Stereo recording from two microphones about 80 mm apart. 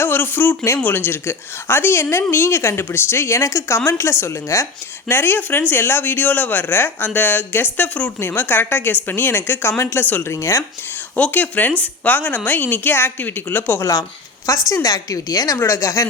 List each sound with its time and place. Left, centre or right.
0.0 s a sound: left
0.8 s speech: left
10.3 s speech: left
11.2 s speech: left
14.7 s a woman's voice: left
15.5 s speech: left